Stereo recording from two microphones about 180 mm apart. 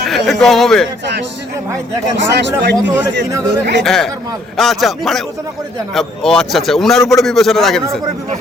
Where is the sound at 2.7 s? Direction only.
10° right (ahead or behind).